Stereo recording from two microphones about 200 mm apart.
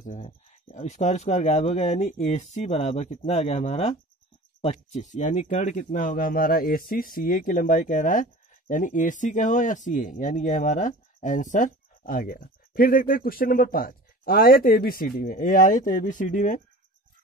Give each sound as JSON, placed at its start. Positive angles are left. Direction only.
{"t": 0.0, "sound": "speech", "side_deg": 40}